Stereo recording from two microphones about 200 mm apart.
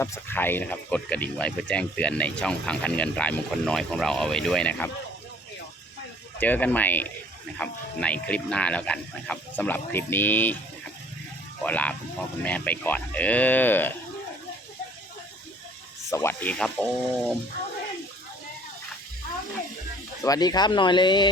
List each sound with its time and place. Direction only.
0.0 s speech: 10° left (ahead or behind)
6.4 s speech: 10° left (ahead or behind)
11.6 s speech: 5° left (ahead or behind)
16.0 s speech: 15° left (ahead or behind)
20.2 s speech: 20° left (ahead or behind)